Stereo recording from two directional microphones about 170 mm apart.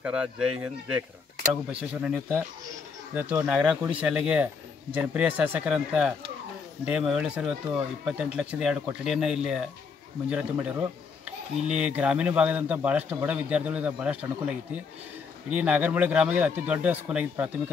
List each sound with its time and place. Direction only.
0.0 s speech: 5° right (ahead or behind)
15.5 s speech: 10° right (ahead or behind)